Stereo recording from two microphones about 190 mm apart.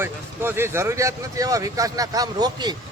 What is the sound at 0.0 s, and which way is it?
Speech, 15° right (ahead or behind).